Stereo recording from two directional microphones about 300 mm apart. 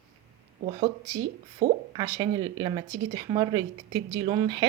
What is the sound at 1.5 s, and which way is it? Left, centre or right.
Speech, centre.